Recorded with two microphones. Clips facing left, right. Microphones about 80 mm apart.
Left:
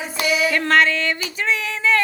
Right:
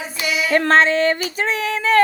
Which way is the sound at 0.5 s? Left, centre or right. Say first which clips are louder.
Right 6 dB; right.